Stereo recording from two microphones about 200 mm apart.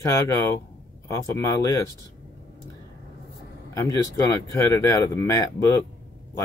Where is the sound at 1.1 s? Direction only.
15° left (ahead or behind).